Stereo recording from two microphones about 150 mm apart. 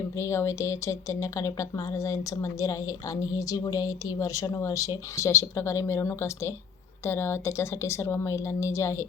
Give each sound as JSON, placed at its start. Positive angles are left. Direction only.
{"t": 0.2, "sound": "speech", "side_deg": 20}